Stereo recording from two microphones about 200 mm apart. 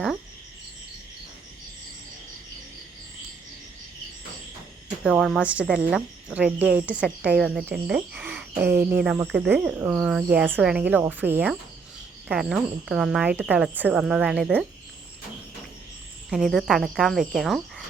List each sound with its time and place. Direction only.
5.0 s speech: 5° right (ahead or behind)
16.3 s speech: centre (ahead or behind)